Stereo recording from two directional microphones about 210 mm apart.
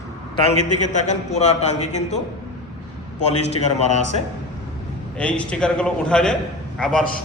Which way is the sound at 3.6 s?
30° left (ahead or behind).